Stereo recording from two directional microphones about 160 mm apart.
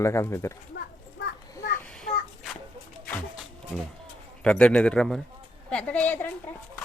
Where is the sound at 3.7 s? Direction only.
5° left (ahead or behind).